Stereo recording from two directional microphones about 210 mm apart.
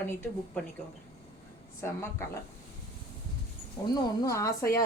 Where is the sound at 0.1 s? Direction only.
10° left (ahead or behind).